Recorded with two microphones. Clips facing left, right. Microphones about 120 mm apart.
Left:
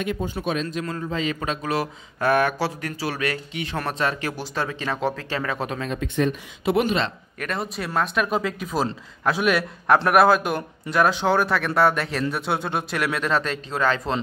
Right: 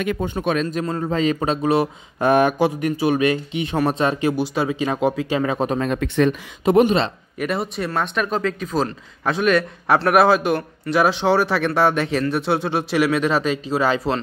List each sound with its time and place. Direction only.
0.0 s speech: 70° right (ahead or behind); by 5.7 s 20° right (ahead or behind)
5.8 s speech: 65° right (ahead or behind)
6.6 s speech: 40° right (ahead or behind)
7.3 s speech: 5° right (ahead or behind)